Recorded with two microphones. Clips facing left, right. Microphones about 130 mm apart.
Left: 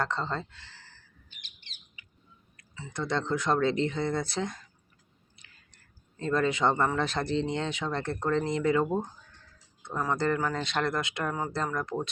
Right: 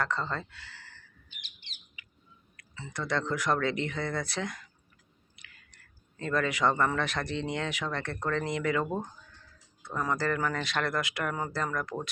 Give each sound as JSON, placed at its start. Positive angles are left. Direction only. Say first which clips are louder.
{"t": 0.0, "sound": "speech", "louder": "left 1 dB", "side_deg": 25}
{"t": 2.9, "sound": "speech", "louder": "left 2 dB", "side_deg": 25}
{"t": 5.7, "sound": "speech", "louder": "even", "side_deg": 30}
{"t": 9.9, "sound": "speech", "louder": "left 1 dB", "side_deg": 10}
{"t": 10.2, "sound": "speech", "louder": "left 2 dB", "side_deg": 25}